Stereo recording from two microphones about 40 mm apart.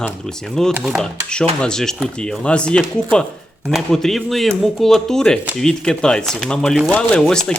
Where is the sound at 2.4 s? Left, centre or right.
Left.